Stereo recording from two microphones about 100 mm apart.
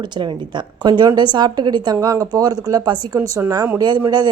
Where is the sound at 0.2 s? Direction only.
50° right (ahead or behind).